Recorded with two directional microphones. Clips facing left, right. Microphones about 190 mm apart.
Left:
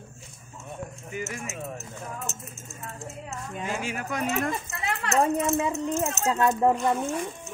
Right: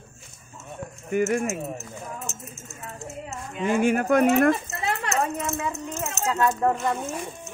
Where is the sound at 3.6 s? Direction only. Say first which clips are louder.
Right 12 dB; 55° right (ahead or behind).